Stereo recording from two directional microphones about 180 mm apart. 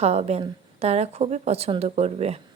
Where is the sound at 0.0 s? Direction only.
35° right (ahead or behind).